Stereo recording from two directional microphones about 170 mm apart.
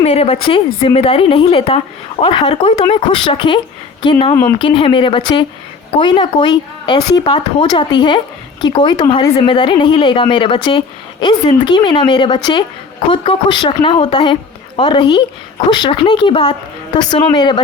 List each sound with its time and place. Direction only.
0.0 s a woman's voice: 35° left (ahead or behind)